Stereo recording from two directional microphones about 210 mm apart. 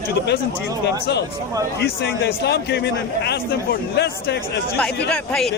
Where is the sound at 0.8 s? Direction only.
55° left (ahead or behind).